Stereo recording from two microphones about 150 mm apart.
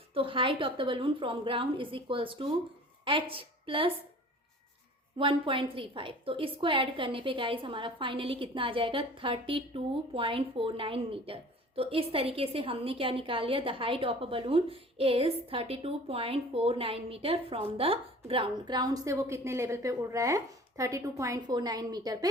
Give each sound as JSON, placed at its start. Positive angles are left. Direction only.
{"t": 0.1, "sound": "a woman's voice", "side_deg": -35}
{"t": 5.1, "sound": "a woman's voice", "side_deg": -35}